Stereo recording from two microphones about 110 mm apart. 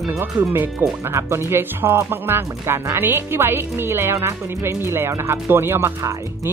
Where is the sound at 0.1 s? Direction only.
25° right (ahead or behind).